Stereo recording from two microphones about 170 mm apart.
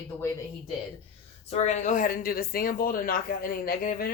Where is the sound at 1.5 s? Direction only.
40° left (ahead or behind).